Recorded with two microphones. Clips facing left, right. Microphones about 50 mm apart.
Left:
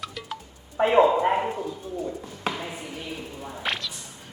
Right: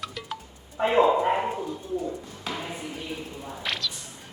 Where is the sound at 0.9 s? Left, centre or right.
Centre.